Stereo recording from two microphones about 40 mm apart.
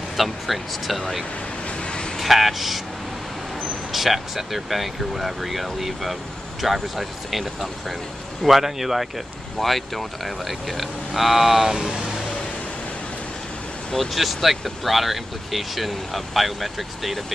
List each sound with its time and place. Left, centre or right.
0.2 s speech: centre
1.8 s vehicle: left
2.1 s speech: centre
3.9 s speech: centre
13.9 s speech: centre